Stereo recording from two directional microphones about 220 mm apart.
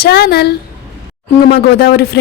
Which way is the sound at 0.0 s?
50° left (ahead or behind).